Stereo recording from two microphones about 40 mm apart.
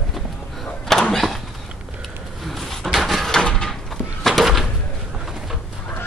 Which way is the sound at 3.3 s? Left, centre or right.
Centre.